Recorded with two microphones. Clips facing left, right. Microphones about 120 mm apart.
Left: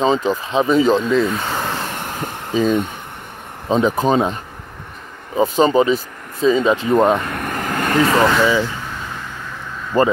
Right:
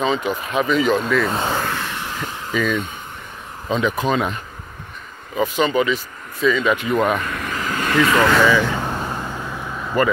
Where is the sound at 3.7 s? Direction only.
35° left (ahead or behind).